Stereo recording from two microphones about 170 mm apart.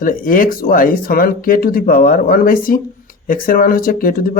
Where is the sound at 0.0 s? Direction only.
55° left (ahead or behind).